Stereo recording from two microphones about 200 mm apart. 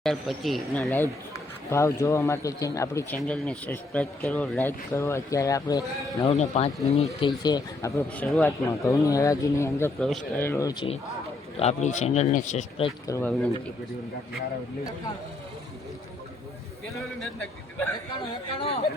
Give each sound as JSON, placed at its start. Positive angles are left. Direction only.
{"t": 0.0, "sound": "speech", "side_deg": 0}
{"t": 1.7, "sound": "speech", "side_deg": 15}
{"t": 3.2, "sound": "speech", "side_deg": 5}
{"t": 6.2, "sound": "speech", "side_deg": 35}
{"t": 13.1, "sound": "speech", "side_deg": 10}
{"t": 17.4, "sound": "a man's voice", "side_deg": 5}
{"t": 18.1, "sound": "speech", "side_deg": 30}